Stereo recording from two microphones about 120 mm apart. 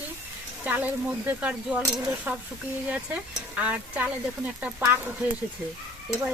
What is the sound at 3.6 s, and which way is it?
Speech, 10° right (ahead or behind).